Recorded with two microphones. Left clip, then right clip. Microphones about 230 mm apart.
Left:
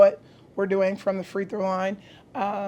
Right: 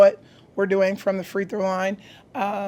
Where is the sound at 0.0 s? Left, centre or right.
Right.